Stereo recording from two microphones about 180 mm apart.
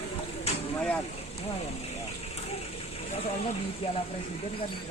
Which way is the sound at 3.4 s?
35° left (ahead or behind).